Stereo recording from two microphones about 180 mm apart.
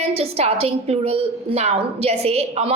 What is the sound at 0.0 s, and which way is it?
A woman's voice, 35° right (ahead or behind).